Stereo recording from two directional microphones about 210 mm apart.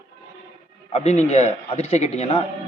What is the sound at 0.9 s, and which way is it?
A man's voice, 30° left (ahead or behind).